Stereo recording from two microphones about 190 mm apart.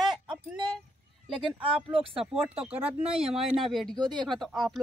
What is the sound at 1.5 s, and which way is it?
Speech, 25° right (ahead or behind).